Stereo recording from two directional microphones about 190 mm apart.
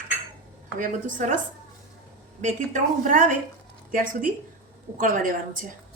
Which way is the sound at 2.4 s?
40° right (ahead or behind).